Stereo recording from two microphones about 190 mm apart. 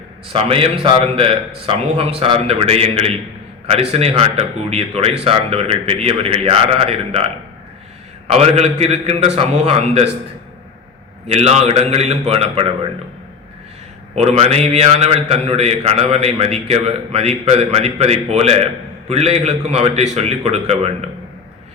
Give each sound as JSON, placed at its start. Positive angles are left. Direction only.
{"t": 0.3, "sound": "a man's voice", "side_deg": -30}
{"t": 8.3, "sound": "a man's voice", "side_deg": -35}
{"t": 11.3, "sound": "a man's voice", "side_deg": -35}
{"t": 14.2, "sound": "a man's voice", "side_deg": -35}